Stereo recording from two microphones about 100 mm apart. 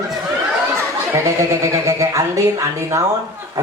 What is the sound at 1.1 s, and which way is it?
Speech, 30° right (ahead or behind).